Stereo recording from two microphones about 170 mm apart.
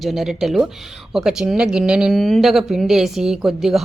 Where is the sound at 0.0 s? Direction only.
Centre (ahead or behind).